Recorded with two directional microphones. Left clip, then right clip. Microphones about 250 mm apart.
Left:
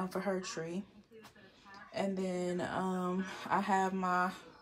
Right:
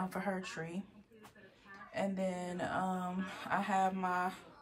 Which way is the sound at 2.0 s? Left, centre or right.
Centre.